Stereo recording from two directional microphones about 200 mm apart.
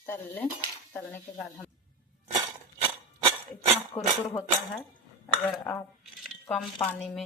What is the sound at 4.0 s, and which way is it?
Speech, 20° left (ahead or behind).